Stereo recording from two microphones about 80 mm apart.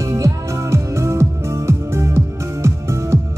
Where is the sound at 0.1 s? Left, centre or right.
Right.